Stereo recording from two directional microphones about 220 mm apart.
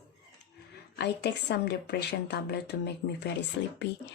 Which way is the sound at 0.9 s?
50° left (ahead or behind).